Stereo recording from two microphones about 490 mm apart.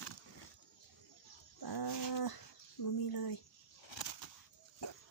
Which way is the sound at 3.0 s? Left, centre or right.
Left.